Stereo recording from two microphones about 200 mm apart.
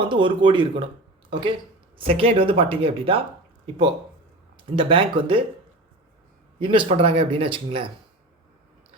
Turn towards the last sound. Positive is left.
turn(degrees=-25)  # may be behind; listen again after turning